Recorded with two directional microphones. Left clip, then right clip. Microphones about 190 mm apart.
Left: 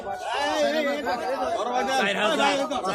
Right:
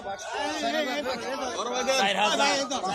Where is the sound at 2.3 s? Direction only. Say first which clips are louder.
Left 2 dB; 55° right (ahead or behind).